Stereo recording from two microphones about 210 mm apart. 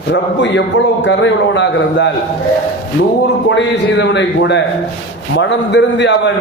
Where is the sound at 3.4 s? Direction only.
55° left (ahead or behind).